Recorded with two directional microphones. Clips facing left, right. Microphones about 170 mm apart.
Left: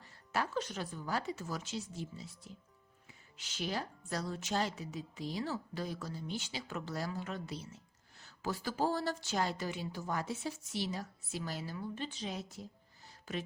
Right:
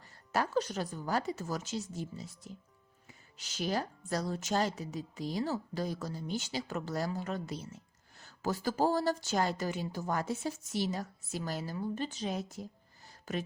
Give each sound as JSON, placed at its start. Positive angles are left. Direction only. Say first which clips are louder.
{"t": 0.3, "sound": "a woman's voice", "louder": "right 5 dB", "side_deg": -40}